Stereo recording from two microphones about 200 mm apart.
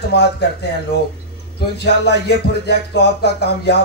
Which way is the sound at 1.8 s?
55° left (ahead or behind).